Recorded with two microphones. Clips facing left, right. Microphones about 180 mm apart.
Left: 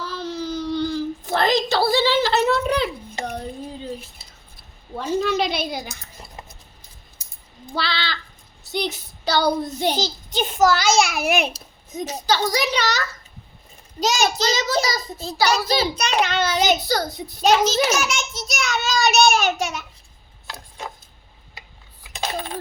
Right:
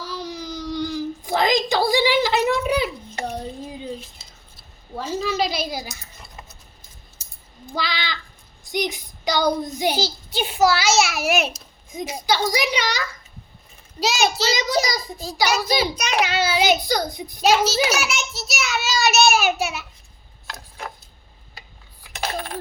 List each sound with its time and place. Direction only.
0.0 s whimper: 10° right (ahead or behind)
3.3 s speech: 10° right (ahead or behind)
5.2 s speech: centre (ahead or behind)
7.8 s a child's voice: 15° right (ahead or behind)
9.2 s child singing: 15° right (ahead or behind)
9.7 s a child's voice: 10° right (ahead or behind)
22.1 s coin: 15° left (ahead or behind)